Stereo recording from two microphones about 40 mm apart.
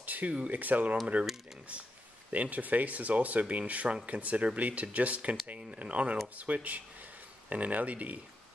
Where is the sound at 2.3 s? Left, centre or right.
Right.